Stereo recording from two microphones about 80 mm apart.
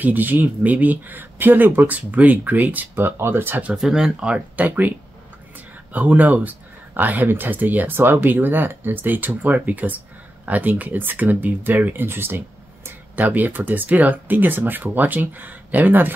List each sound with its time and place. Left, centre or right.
0.0 s speech: right
3.7 s speech: centre
5.9 s speech: centre